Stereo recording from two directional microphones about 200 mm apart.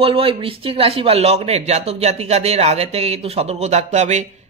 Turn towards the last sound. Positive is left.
turn(degrees=-35)  # may be behind; listen again after turning